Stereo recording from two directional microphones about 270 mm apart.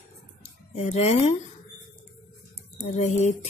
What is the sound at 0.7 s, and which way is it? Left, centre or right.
Speech, left.